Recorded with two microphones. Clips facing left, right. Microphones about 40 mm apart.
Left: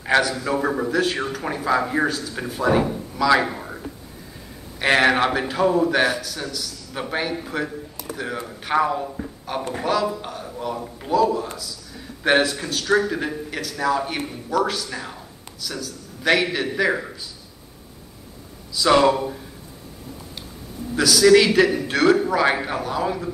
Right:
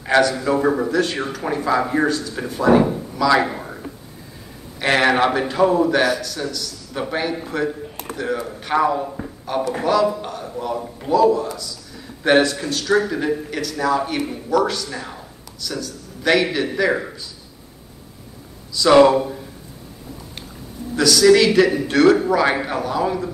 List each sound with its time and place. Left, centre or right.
0.0 s a man's voice: centre
3.2 s speech: centre
3.4 s a sound: centre
4.7 s a man's voice: centre
5.9 s a man's voice: centre
8.0 s a sound: right
8.5 s a man's voice: centre
9.0 s a sound: centre
10.0 s a man's voice: centre
18.7 s speech: centre
18.9 s speech: centre
20.9 s a man's voice: centre
21.5 s a man's voice: centre